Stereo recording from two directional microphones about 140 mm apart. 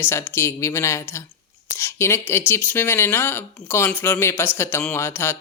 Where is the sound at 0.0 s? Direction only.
15° left (ahead or behind).